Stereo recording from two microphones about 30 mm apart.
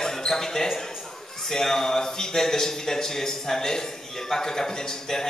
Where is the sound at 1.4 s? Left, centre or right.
Centre.